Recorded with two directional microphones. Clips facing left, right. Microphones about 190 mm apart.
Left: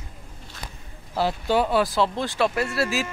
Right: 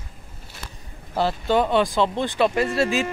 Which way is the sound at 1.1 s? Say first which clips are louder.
Right 2 dB; 10° left (ahead or behind).